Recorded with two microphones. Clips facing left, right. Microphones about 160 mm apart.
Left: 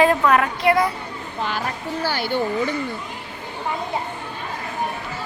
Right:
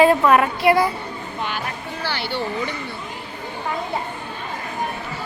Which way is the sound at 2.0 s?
45° left (ahead or behind).